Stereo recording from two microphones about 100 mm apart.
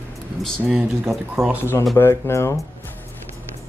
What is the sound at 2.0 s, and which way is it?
Speech, 25° left (ahead or behind).